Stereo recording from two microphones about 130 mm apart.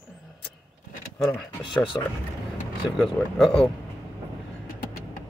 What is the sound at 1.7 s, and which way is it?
Speech, 40° left (ahead or behind).